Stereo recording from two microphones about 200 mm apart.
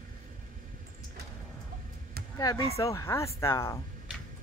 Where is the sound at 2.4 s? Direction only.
20° left (ahead or behind).